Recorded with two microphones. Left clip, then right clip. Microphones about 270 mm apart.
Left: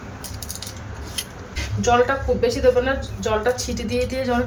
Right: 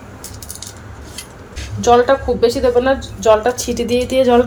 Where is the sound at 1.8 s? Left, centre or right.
Right.